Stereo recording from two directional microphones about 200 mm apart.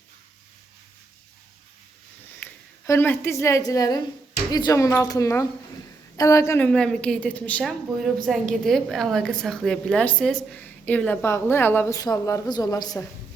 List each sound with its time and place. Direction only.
2.4 s a woman's voice: 10° left (ahead or behind)